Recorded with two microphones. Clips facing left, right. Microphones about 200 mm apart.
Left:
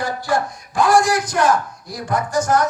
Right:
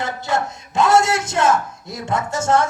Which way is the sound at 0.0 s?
25° right (ahead or behind).